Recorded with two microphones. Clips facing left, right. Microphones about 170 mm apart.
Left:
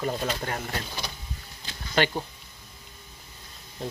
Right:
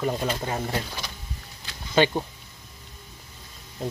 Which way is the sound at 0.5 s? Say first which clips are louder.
Right 4 dB; 20° right (ahead or behind).